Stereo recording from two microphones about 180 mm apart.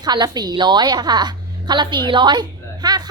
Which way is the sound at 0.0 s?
25° right (ahead or behind).